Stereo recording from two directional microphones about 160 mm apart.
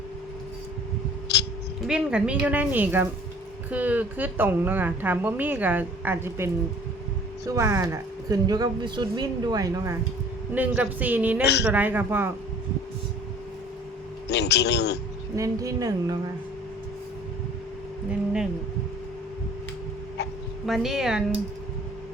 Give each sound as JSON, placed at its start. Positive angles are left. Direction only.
{"t": 1.3, "sound": "a sound", "side_deg": 90}
{"t": 1.9, "sound": "speech", "side_deg": -5}
{"t": 10.5, "sound": "speech", "side_deg": -10}
{"t": 14.3, "sound": "speech", "side_deg": 90}
{"t": 15.4, "sound": "speech", "side_deg": -20}
{"t": 20.7, "sound": "speech", "side_deg": 0}